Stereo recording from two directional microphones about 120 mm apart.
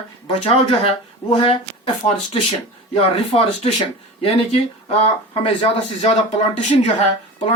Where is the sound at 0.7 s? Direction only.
55° left (ahead or behind).